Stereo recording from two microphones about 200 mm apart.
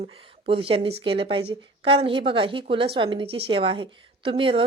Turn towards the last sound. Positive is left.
turn(degrees=-25)  # may be behind; listen again after turning